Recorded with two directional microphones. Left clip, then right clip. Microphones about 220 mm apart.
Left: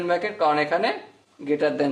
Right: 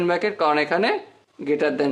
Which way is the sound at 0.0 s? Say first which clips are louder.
Right 1 dB; 30° right (ahead or behind).